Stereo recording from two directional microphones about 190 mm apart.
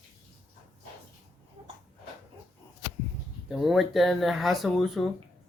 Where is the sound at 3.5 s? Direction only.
Centre (ahead or behind).